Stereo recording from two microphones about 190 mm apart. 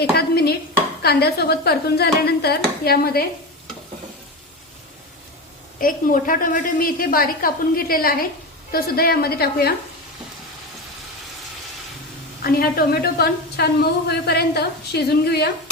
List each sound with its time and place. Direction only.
0.0 s speech: 55° left (ahead or behind)
5.8 s a woman's voice: 45° left (ahead or behind)
12.4 s a woman's voice: 50° left (ahead or behind)